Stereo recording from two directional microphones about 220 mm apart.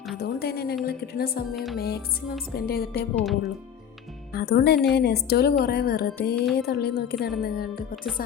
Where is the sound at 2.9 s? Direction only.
5° left (ahead or behind).